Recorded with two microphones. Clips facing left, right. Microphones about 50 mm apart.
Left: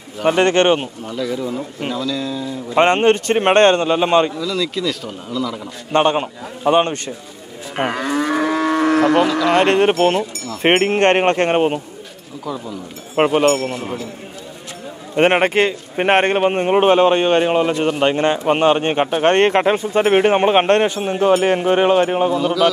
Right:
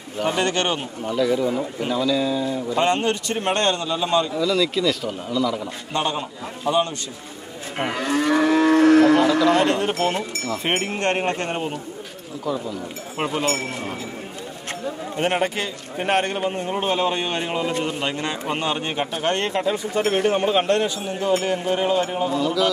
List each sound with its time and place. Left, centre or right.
0.3 s a man's voice: left
1.0 s speech: centre
2.7 s a man's voice: left
4.4 s speech: centre
5.9 s a man's voice: left
7.7 s livestock: left
8.1 s moo: left
8.8 s cattle: left
9.5 s a man's voice: left
12.4 s speech: centre
13.1 s a man's voice: left
15.1 s a man's voice: left